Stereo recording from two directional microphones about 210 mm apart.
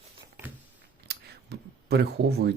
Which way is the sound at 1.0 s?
50° right (ahead or behind).